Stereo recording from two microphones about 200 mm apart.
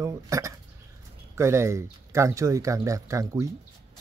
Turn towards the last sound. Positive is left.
turn(degrees=-15)  # may be behind; listen again after turning